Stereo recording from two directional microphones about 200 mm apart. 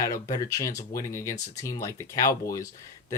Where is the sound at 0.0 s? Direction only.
15° left (ahead or behind).